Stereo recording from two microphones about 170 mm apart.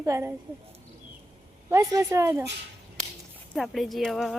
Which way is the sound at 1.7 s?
20° right (ahead or behind).